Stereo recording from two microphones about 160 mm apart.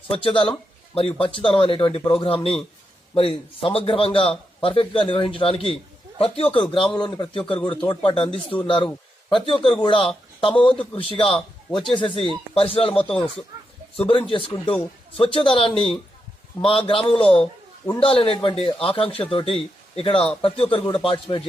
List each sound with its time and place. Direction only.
0.1 s a man's voice: 35° left (ahead or behind)